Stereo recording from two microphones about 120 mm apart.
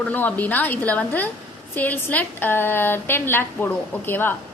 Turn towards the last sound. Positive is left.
turn(degrees=20)  # may be behind; listen again after turning